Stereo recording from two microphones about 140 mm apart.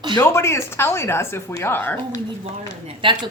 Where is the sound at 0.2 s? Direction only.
20° left (ahead or behind).